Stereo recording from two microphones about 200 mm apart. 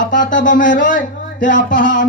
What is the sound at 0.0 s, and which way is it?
Speech, 40° left (ahead or behind).